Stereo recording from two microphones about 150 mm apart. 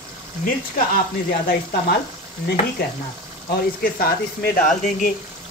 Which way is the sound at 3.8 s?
85° left.